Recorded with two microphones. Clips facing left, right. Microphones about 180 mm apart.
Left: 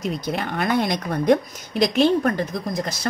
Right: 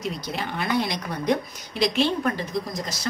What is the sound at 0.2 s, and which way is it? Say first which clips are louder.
A woman's voice: left 5 dB; 50° left (ahead or behind).